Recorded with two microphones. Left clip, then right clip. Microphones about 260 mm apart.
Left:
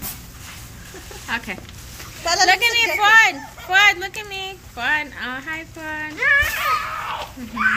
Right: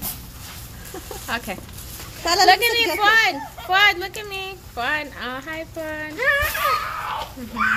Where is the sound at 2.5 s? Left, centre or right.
Centre.